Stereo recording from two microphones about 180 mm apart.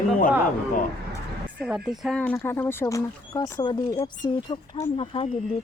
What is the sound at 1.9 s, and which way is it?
Speech, 5° left (ahead or behind).